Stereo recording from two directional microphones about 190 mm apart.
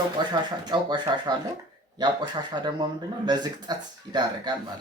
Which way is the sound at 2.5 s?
25° right (ahead or behind).